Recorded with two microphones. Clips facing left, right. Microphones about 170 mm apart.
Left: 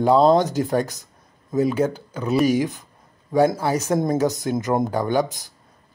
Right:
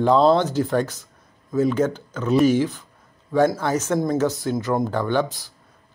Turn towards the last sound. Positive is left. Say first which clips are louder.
# left 1 dB
turn(degrees=15)  # may be behind; listen again after turning